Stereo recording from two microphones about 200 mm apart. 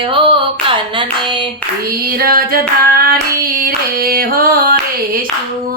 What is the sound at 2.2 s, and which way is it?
Female singing, 45° right (ahead or behind).